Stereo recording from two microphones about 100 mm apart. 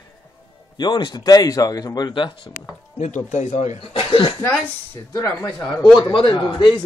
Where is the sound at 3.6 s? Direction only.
90° left; by 4.3 s 65° left (ahead or behind).